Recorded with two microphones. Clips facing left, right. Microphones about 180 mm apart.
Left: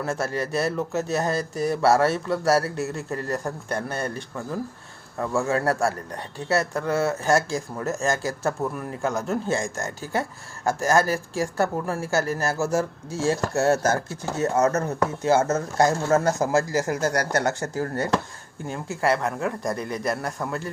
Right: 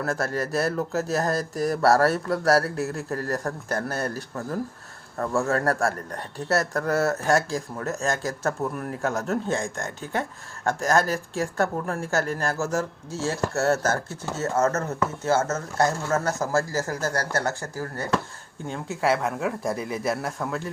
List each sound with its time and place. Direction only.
0.0 s speech: centre (ahead or behind); by 18.2 s 20° left (ahead or behind)
18.6 s speech: centre (ahead or behind)